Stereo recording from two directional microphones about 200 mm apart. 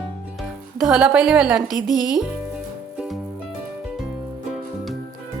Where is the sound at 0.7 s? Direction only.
Centre (ahead or behind).